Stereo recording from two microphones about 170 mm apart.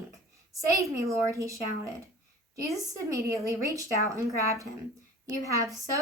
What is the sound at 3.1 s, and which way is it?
A woman's voice, 15° right (ahead or behind).